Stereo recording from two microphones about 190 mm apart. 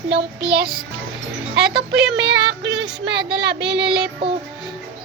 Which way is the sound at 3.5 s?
65° right (ahead or behind).